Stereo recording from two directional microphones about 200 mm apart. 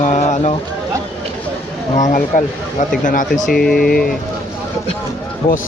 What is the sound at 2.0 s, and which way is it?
Speech, 40° left (ahead or behind).